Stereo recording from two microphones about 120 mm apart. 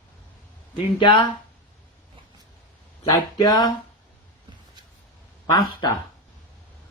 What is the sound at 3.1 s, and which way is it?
Speech, 35° left (ahead or behind).